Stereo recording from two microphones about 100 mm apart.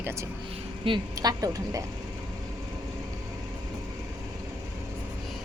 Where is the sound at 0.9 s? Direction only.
60° right (ahead or behind).